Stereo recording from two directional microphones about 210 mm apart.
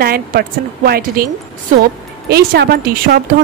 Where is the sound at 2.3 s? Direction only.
45° right (ahead or behind).